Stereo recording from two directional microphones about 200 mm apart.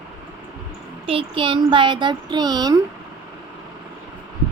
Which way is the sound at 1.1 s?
25° right (ahead or behind).